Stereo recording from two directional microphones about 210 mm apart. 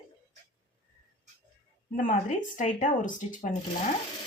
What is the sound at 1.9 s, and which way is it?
A woman's voice, 40° left (ahead or behind).